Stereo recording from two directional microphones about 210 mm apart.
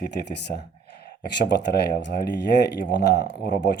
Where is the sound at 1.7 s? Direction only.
55° left (ahead or behind).